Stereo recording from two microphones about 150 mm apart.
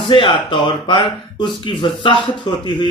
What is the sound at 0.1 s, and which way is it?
Speech, 30° left (ahead or behind).